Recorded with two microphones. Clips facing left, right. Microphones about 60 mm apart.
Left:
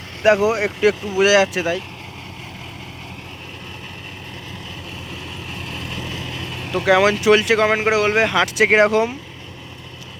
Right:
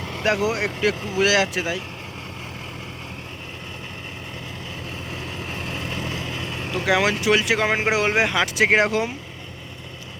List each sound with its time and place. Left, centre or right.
0.5 s speech: centre
5.1 s vehicle: right; by 6.7 s centre
6.8 s speech: centre
7.8 s speech: centre